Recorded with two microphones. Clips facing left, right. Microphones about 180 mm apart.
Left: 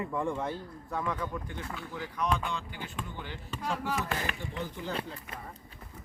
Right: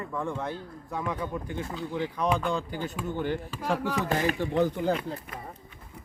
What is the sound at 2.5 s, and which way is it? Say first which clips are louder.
Speech: right 7 dB; 40° right (ahead or behind).